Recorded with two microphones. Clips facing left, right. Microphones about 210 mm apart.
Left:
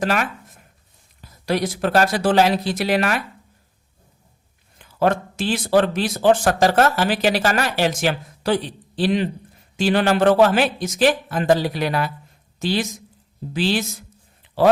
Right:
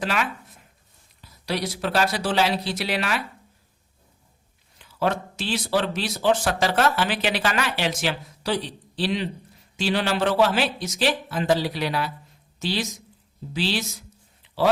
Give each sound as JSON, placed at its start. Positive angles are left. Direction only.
{"t": 0.0, "sound": "speech", "side_deg": 45}
{"t": 4.8, "sound": "speech", "side_deg": 50}